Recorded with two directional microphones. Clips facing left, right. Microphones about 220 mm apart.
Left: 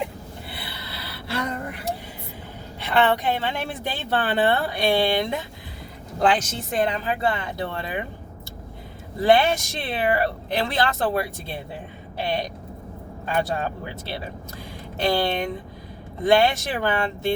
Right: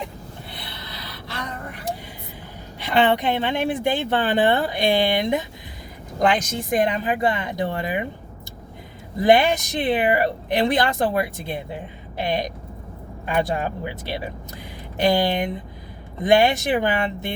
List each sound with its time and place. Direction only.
0.5 s snort: 5° left (ahead or behind)
2.8 s speech: 15° right (ahead or behind)
9.2 s speech: 15° right (ahead or behind)